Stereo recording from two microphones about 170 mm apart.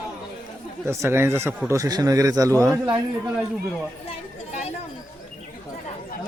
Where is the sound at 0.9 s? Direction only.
15° right (ahead or behind).